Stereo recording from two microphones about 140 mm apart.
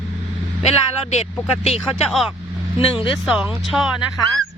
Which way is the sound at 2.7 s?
35° left (ahead or behind).